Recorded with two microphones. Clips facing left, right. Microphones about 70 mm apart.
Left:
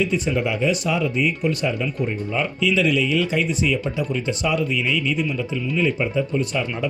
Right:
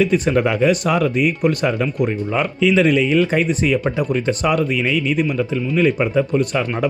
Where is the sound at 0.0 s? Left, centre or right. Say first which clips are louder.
Right 6 dB; right.